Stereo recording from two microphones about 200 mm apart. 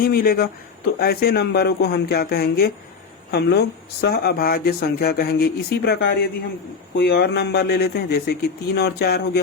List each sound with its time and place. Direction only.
0.0 s speech: 50° left (ahead or behind)